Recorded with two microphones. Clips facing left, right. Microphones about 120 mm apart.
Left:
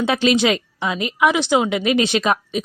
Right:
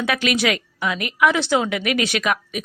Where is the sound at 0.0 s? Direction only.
25° left (ahead or behind).